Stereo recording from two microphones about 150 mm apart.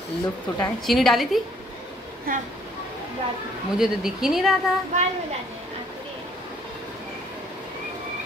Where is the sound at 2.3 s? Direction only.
75° right (ahead or behind).